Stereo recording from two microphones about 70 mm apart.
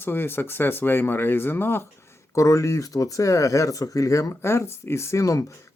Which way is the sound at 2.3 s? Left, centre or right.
Left.